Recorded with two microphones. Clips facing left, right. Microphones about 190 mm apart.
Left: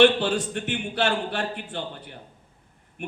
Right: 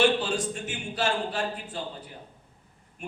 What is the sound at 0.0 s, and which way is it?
A man's voice, 65° left (ahead or behind).